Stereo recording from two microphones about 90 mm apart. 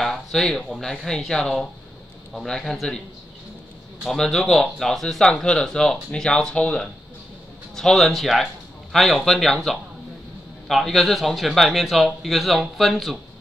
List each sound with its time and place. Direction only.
0.0 s a man's voice: 5° left (ahead or behind)
4.1 s a man's voice: 5° left (ahead or behind)